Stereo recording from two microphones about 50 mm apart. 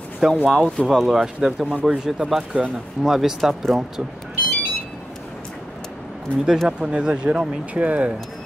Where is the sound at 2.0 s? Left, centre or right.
Centre.